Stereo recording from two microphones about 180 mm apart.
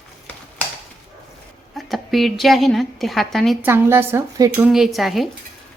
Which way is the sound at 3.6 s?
15° right (ahead or behind).